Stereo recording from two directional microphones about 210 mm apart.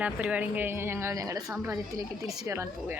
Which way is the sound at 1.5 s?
5° right (ahead or behind).